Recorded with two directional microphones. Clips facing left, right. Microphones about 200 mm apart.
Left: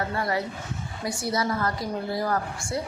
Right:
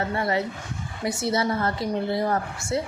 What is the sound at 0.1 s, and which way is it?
A woman's voice, 25° right (ahead or behind).